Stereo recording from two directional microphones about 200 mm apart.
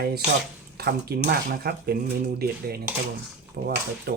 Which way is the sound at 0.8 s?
50° right (ahead or behind).